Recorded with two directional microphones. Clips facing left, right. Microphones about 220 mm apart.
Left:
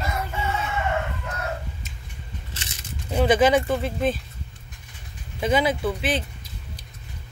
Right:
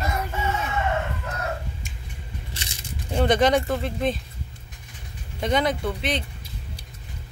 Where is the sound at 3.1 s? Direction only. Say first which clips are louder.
Left 1 dB; 5° left (ahead or behind).